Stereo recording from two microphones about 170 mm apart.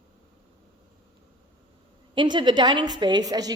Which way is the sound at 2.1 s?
25° right (ahead or behind).